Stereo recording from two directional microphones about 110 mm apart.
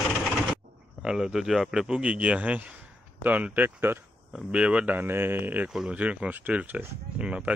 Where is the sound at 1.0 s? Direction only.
5° right (ahead or behind).